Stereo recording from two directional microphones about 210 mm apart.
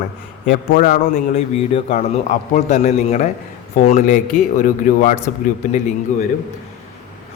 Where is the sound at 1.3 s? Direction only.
30° left (ahead or behind).